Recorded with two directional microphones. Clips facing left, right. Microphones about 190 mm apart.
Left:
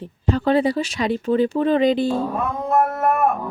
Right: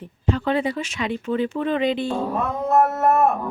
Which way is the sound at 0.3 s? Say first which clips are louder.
Left 4 dB; 35° left (ahead or behind).